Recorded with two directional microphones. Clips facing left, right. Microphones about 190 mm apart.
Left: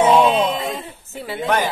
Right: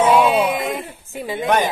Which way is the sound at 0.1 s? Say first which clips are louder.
Even; 5° right (ahead or behind).